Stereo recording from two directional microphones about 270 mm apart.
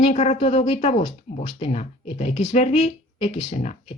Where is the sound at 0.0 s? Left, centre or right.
Left.